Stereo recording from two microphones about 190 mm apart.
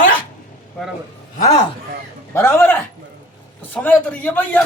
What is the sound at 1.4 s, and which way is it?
Speech, 35° left (ahead or behind).